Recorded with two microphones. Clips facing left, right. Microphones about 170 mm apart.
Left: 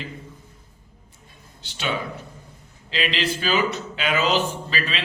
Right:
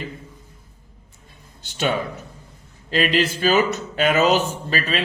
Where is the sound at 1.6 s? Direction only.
45° right (ahead or behind).